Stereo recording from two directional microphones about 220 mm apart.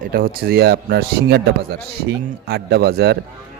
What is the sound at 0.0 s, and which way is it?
Speech, 40° right (ahead or behind).